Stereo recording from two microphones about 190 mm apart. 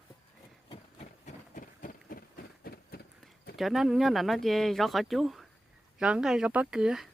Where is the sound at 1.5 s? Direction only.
45° left (ahead or behind).